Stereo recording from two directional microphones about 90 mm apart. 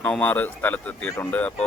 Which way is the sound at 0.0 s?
15° left (ahead or behind).